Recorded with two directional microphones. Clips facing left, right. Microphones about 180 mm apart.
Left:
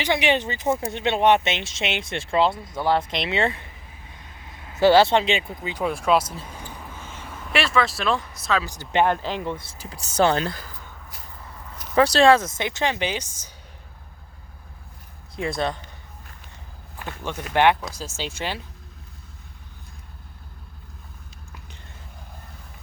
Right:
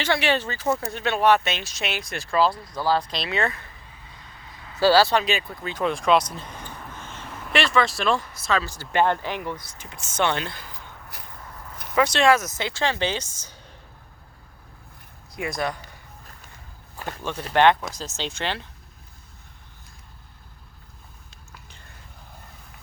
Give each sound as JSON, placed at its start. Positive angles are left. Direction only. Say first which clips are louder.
{"t": 0.0, "sound": "speech", "louder": "left 1 dB", "side_deg": 15}
{"t": 4.4, "sound": "vehicle", "louder": "left 2 dB", "side_deg": 20}
{"t": 7.3, "sound": "speech", "louder": "even", "side_deg": 0}
{"t": 8.6, "sound": "speech", "louder": "left 2 dB", "side_deg": 20}
{"t": 11.9, "sound": "speech", "louder": "left 3 dB", "side_deg": 35}
{"t": 15.4, "sound": "speech", "louder": "left 2 dB", "side_deg": 25}
{"t": 17.5, "sound": "speech", "louder": "right 1 dB", "side_deg": 15}